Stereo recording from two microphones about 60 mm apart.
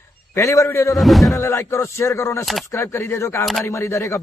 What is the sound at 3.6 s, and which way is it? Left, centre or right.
Speech, left.